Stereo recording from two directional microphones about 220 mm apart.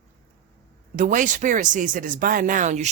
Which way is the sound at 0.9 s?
35° right (ahead or behind).